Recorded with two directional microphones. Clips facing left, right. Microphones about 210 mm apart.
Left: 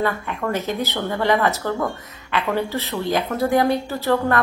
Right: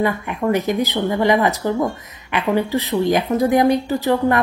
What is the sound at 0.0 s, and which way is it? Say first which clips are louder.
A woman's voice: right 4 dB; 15° right (ahead or behind).